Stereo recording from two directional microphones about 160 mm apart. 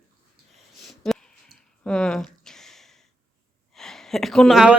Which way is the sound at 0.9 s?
Centre (ahead or behind).